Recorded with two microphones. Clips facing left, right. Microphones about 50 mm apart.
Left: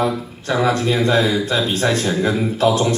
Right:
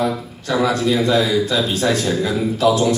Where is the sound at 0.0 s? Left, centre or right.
Left.